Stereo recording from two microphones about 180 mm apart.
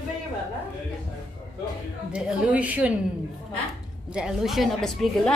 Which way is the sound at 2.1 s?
5° right (ahead or behind).